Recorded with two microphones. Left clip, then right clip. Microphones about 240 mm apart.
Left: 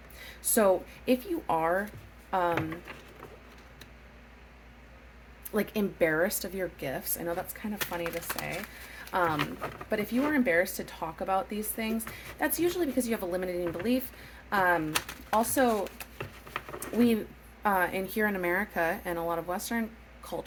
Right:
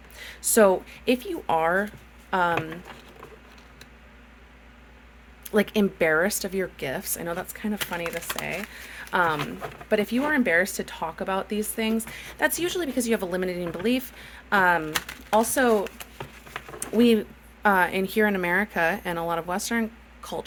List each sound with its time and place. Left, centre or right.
0.2 s speech: right
5.5 s speech: right
17.6 s speech: right